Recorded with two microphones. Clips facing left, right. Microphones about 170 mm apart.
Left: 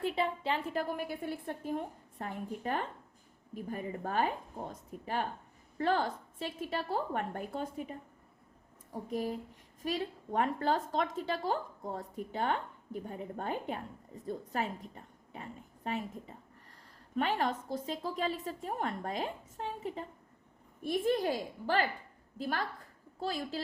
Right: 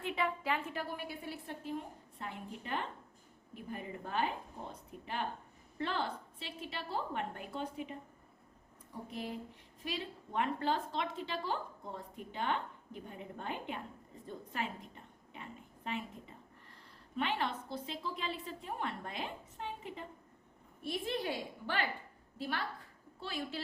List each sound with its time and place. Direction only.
0.0 s a woman's voice: 30° left (ahead or behind)
17.2 s a woman's voice: 40° left (ahead or behind)